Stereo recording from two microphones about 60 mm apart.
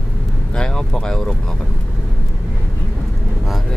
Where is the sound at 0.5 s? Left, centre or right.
Centre.